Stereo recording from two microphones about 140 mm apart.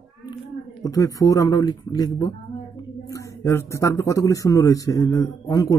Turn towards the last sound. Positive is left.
turn(degrees=25)  # may be behind; listen again after turning